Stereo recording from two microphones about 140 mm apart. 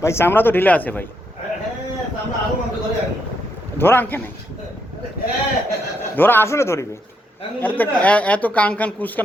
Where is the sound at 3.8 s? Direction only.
15° left (ahead or behind).